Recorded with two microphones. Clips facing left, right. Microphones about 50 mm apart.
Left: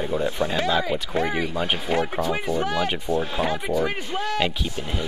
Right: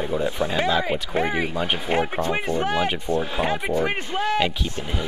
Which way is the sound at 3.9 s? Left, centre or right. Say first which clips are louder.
Right 3 dB; centre.